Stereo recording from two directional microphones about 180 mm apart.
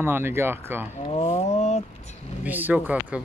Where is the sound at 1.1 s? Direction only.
40° left (ahead or behind).